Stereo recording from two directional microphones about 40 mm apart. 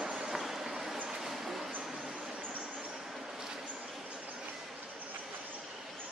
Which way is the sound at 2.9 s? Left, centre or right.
Centre.